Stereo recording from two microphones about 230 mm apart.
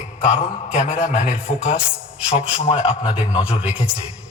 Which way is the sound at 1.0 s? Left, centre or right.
Centre.